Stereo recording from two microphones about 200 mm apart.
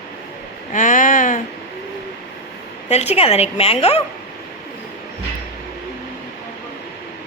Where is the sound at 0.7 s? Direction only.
40° left (ahead or behind).